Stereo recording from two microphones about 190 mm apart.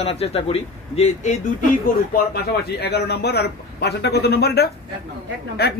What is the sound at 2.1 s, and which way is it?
Speech, 60° left (ahead or behind).